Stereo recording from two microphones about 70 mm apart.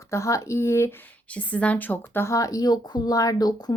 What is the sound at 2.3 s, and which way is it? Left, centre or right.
Speech, left.